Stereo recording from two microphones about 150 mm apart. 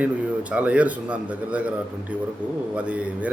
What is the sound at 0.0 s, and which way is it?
Speech, 10° right (ahead or behind).